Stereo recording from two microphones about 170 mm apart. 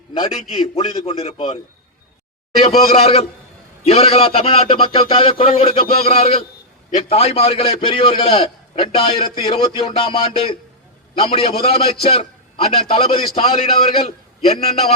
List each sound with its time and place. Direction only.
0.1 s a man's voice: 30° left (ahead or behind)
2.8 s a man's voice: 35° left (ahead or behind)